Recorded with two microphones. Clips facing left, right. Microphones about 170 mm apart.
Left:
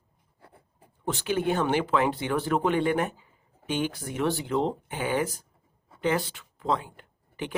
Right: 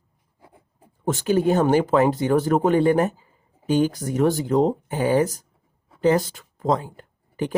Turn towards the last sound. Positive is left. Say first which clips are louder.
# right 8 dB
turn(degrees=-40)  # may be behind; listen again after turning